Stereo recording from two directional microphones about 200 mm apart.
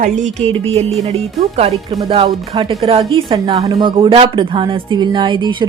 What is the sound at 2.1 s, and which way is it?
Music, 25° right (ahead or behind).